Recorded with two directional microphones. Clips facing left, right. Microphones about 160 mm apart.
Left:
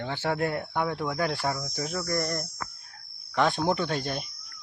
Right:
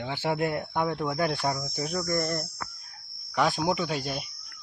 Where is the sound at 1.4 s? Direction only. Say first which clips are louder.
Right 1 dB; 20° right (ahead or behind).